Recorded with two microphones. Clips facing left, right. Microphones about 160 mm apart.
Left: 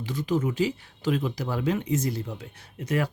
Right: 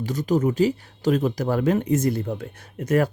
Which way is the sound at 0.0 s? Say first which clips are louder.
Right 5 dB; 40° right (ahead or behind).